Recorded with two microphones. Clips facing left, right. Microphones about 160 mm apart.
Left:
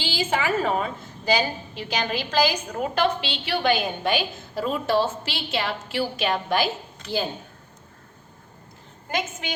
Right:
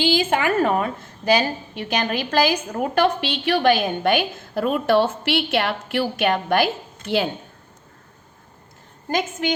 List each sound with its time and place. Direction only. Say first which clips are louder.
0.0 s a woman's voice: right 6 dB; 55° right (ahead or behind)